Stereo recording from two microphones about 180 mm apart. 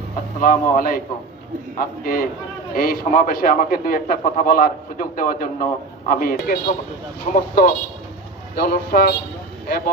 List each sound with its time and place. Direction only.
0.4 s a man's voice: 50° left (ahead or behind)